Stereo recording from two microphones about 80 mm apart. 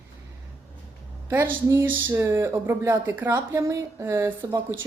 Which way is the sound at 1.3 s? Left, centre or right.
Right.